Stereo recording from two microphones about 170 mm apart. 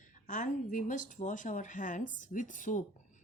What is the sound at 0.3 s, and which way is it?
Speech, 50° left (ahead or behind).